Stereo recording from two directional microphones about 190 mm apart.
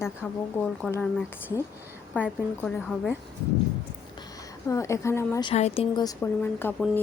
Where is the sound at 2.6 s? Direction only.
5° left (ahead or behind).